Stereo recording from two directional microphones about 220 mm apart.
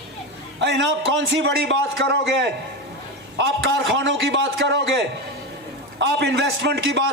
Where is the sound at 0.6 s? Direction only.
55° right (ahead or behind).